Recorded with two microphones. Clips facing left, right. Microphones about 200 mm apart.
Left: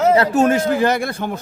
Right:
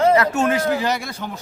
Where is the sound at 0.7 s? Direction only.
55° left (ahead or behind).